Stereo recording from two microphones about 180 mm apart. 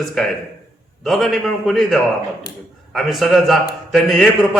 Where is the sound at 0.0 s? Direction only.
Centre (ahead or behind).